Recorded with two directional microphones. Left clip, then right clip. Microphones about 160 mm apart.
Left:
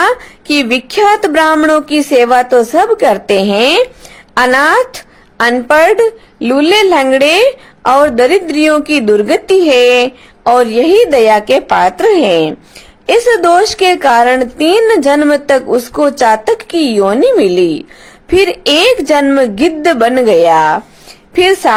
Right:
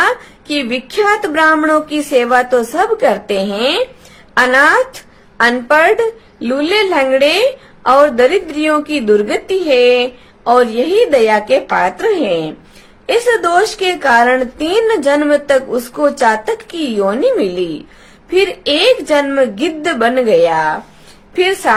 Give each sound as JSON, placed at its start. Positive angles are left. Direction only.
{"t": 0.0, "sound": "a woman's voice", "side_deg": 45}